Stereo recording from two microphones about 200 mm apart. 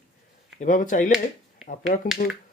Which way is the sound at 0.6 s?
40° left (ahead or behind).